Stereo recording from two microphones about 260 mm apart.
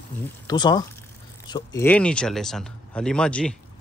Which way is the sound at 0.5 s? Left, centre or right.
Centre.